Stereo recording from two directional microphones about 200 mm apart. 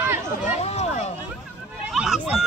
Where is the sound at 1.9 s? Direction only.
5° right (ahead or behind).